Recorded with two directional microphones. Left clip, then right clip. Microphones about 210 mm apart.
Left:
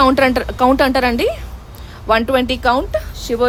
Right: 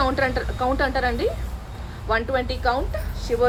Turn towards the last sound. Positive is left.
turn(degrees=65)  # may be behind; listen again after turning